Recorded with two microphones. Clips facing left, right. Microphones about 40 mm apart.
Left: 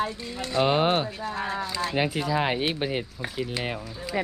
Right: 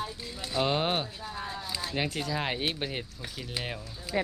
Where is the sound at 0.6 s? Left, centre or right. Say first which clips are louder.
Left 6 dB; centre.